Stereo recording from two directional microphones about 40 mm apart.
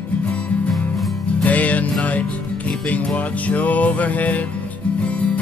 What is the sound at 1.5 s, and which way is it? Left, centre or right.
Music, left.